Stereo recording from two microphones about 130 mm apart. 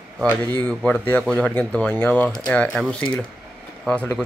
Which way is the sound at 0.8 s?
10° left (ahead or behind).